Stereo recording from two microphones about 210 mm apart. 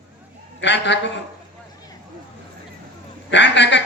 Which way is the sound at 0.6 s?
60° left (ahead or behind).